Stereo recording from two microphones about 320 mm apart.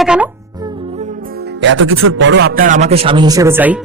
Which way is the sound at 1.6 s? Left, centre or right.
Right.